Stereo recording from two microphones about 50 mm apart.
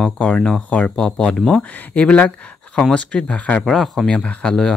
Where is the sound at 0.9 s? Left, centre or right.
Centre.